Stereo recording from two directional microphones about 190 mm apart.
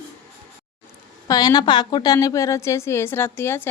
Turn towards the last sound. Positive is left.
turn(degrees=10)  # may be behind; listen again after turning